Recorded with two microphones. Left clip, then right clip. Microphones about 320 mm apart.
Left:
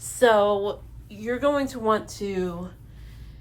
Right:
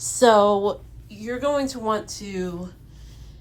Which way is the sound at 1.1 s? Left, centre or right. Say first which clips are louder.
Even; centre.